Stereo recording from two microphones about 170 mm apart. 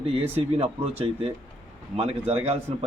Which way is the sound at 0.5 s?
35° right (ahead or behind).